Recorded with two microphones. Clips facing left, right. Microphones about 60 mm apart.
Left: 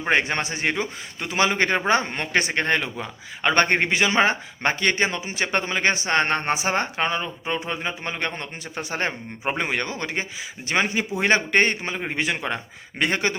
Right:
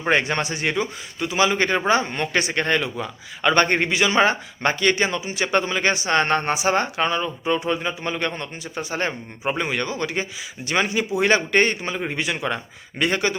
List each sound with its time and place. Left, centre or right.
0.1 s a man's voice: left
1.3 s a man's voice: left
6.5 s a man's voice: left
8.7 s a man's voice: left
12.2 s a man's voice: left